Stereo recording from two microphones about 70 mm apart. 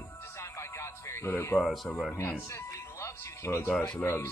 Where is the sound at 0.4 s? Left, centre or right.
Left.